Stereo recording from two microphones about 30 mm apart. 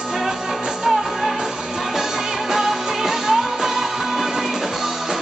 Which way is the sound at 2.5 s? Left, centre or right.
Centre.